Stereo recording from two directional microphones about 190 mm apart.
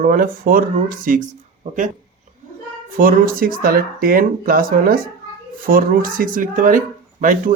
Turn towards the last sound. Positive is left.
turn(degrees=-45)  # may be behind; listen again after turning